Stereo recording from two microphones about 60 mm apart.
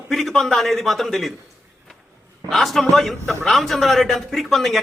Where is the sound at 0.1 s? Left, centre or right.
Centre.